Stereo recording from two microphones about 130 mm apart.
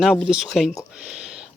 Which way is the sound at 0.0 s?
Centre (ahead or behind).